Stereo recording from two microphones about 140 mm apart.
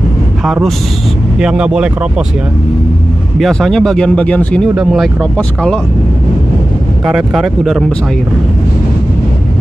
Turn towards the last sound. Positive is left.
turn(degrees=0)  # may be behind; listen again after turning